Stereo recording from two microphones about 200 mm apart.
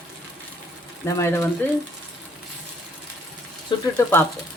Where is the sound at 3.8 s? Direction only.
10° left (ahead or behind).